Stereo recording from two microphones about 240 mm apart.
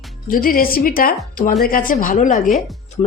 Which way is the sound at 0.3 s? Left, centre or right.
Left.